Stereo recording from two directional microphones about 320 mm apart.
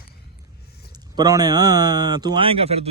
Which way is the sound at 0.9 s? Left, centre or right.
Centre.